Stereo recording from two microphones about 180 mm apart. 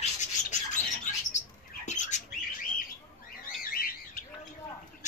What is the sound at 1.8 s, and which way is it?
Rodents, 40° left (ahead or behind).